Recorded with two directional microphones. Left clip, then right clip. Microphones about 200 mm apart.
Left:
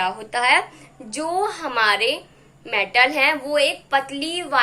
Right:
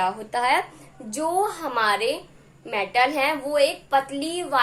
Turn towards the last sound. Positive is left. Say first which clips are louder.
# left 2 dB
turn(degrees=-10)  # may be behind; listen again after turning